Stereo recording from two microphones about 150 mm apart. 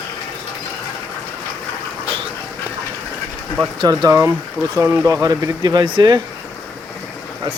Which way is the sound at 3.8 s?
25° right (ahead or behind).